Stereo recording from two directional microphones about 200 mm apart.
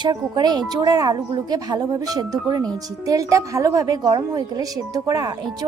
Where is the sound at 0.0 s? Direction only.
20° right (ahead or behind).